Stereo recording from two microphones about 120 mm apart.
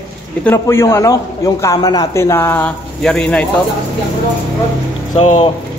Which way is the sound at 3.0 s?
10° left (ahead or behind).